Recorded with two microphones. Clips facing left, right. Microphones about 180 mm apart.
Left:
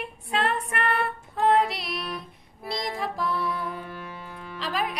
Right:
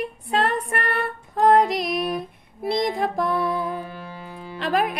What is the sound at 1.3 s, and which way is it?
Female singing, 45° right (ahead or behind).